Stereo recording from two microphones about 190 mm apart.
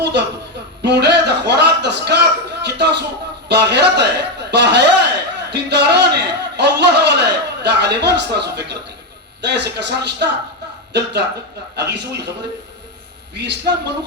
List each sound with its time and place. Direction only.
0.0 s speech: 65° right (ahead or behind)
0.8 s a sound: 65° right (ahead or behind)
3.5 s a man's voice: 65° right (ahead or behind)
13.3 s speech: 65° right (ahead or behind)